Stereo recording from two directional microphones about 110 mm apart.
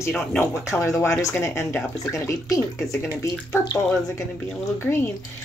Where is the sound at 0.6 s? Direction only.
25° left (ahead or behind).